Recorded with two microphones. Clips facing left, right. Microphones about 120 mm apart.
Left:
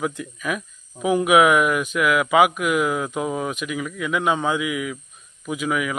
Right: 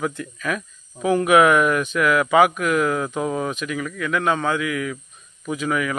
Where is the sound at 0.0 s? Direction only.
10° left (ahead or behind).